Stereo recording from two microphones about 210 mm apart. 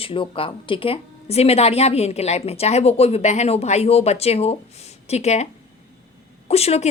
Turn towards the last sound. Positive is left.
turn(degrees=30)  # may be behind; listen again after turning